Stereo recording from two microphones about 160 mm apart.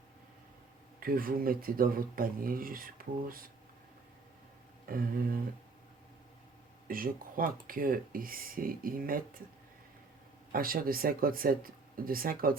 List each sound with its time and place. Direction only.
0.9 s speech: 65° right (ahead or behind)
4.9 s speech: 65° right (ahead or behind)
6.8 s speech: 65° right (ahead or behind)
10.5 s speech: 65° right (ahead or behind)